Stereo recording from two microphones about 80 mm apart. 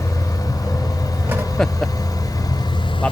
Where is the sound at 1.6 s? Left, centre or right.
Centre.